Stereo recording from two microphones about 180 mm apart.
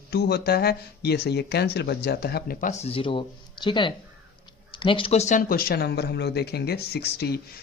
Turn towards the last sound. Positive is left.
turn(degrees=65)  # may be behind; listen again after turning